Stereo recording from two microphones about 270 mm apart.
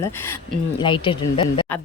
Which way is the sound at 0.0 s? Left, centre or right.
Centre.